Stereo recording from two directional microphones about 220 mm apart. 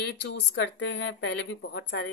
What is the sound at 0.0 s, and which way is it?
Speech, 55° left (ahead or behind).